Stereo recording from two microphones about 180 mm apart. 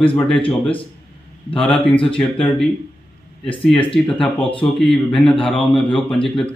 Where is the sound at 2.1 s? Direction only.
5° left (ahead or behind).